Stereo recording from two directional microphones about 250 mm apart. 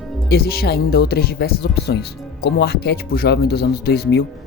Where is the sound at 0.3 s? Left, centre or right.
Left.